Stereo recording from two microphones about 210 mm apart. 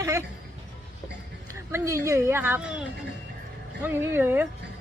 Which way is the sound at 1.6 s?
15° right (ahead or behind).